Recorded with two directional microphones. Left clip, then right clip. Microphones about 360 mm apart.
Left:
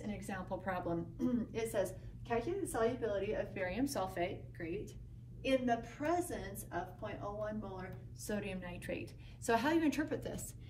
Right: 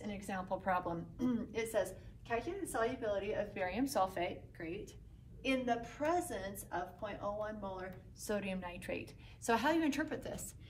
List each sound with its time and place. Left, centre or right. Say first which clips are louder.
0.0 s a woman's voice: right 2 dB; centre